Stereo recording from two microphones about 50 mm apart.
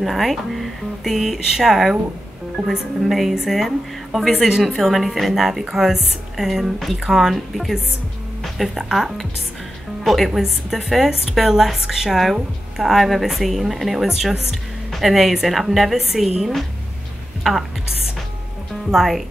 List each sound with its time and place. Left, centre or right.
0.0 s a woman's voice: centre
18.9 s a woman's voice: centre